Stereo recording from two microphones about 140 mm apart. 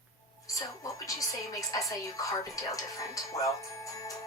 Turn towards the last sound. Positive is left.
turn(degrees=25)  # may be behind; listen again after turning